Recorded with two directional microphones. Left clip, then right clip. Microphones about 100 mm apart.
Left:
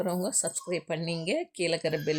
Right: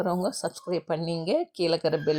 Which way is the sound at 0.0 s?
25° right (ahead or behind).